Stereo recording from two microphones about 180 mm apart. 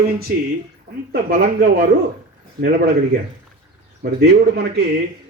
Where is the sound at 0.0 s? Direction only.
60° right (ahead or behind).